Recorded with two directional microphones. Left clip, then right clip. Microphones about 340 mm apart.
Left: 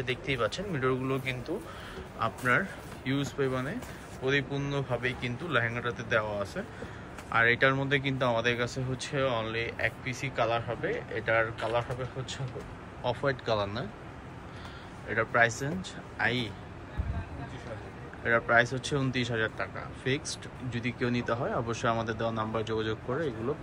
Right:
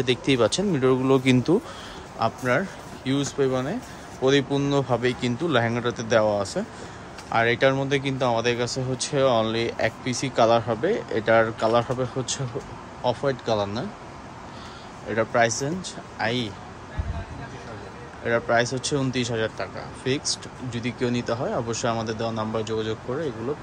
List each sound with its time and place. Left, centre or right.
0.0 s speech: centre
13.0 s speech: centre
15.0 s speech: centre
18.2 s speech: centre